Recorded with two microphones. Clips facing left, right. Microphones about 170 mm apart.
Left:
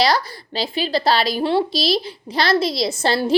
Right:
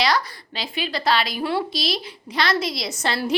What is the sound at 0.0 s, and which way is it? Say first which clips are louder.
A woman's voice: left 4 dB; 35° left (ahead or behind).